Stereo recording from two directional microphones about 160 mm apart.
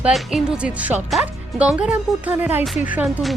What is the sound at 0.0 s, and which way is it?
A woman's voice, centre (ahead or behind).